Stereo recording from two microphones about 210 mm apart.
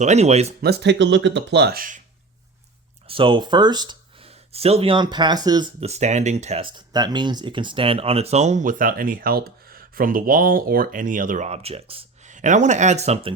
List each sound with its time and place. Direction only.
0.0 s speech: 30° right (ahead or behind)
0.6 s speech: 50° right (ahead or behind)
3.1 s speech: 25° right (ahead or behind)
5.8 s speech: 30° right (ahead or behind)